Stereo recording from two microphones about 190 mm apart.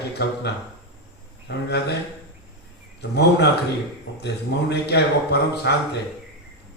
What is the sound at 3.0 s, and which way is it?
Speech, 60° left (ahead or behind).